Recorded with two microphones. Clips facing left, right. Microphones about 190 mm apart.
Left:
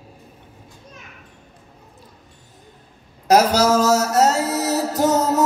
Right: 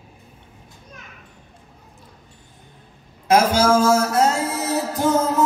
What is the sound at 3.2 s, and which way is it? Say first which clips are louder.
Music: left 1 dB; 40° left (ahead or behind).